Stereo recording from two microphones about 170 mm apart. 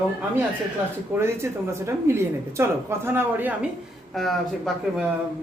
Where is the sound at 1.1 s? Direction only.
15° right (ahead or behind).